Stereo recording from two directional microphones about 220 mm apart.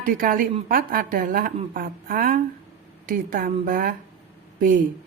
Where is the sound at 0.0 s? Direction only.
40° right (ahead or behind).